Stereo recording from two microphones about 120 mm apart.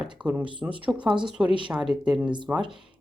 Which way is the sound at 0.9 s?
40° right (ahead or behind).